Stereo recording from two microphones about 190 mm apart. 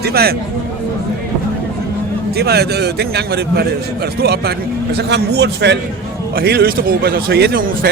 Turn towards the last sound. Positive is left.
turn(degrees=-50)  # may be behind; listen again after turning